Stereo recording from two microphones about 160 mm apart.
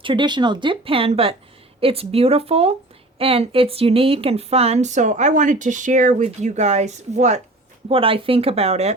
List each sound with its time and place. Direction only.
0.0 s speech: 30° right (ahead or behind); by 7.4 s 45° right (ahead or behind)
7.9 s speech: 35° right (ahead or behind)